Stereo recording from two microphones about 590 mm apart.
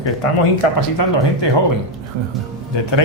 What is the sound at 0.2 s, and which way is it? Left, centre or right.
Speech, left.